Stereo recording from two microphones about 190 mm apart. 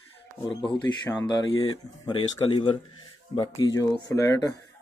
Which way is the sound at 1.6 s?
25° left (ahead or behind).